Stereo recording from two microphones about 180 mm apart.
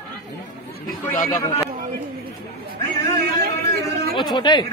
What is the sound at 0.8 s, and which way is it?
Speech, 50° left (ahead or behind).